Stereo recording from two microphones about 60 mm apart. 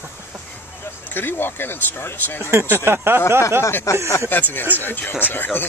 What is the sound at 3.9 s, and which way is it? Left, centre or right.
Speech, left.